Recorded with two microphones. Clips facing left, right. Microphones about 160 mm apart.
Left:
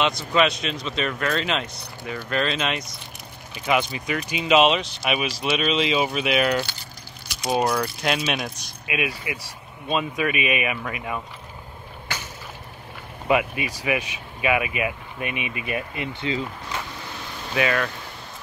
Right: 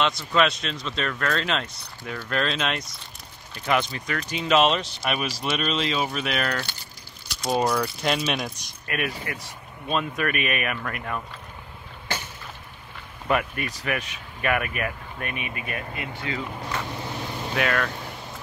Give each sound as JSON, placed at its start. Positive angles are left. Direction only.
{"t": 0.0, "sound": "speech", "side_deg": 5}
{"t": 13.3, "sound": "speech", "side_deg": 10}
{"t": 17.6, "sound": "speech", "side_deg": 5}